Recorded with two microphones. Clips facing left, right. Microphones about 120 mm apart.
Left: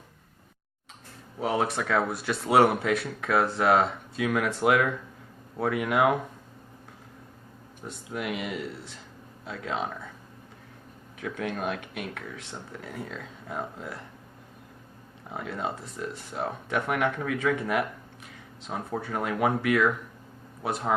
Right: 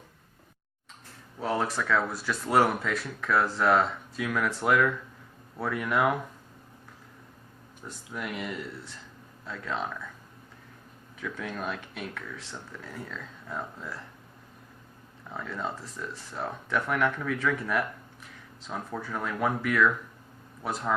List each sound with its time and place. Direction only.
1.4 s speech: 65° left (ahead or behind)
7.8 s speech: 60° left (ahead or behind)
11.2 s speech: 60° left (ahead or behind)
15.3 s speech: 65° left (ahead or behind)